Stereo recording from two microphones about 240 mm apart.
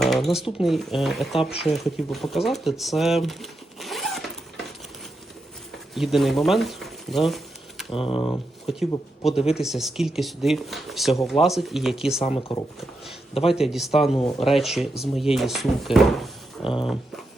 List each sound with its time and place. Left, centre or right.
0.0 s a sound: centre
0.6 s speech: centre
5.9 s speech: centre
7.9 s speech: left
9.6 s speech: centre
12.2 s speech: left
13.5 s speech: centre